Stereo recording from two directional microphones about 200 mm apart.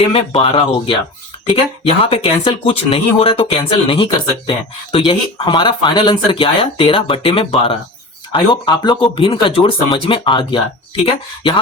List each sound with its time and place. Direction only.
0.1 s speech: 25° left (ahead or behind)